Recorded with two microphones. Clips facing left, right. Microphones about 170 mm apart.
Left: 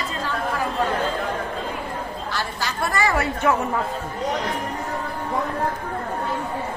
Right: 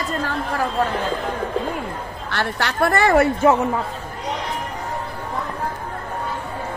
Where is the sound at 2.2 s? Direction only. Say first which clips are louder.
Right 7 dB; 65° right (ahead or behind).